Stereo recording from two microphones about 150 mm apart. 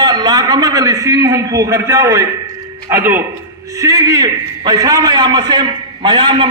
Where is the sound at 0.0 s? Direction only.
30° right (ahead or behind).